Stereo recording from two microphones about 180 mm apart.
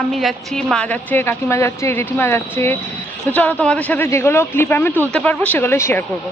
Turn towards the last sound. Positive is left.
turn(degrees=15)  # may be behind; listen again after turning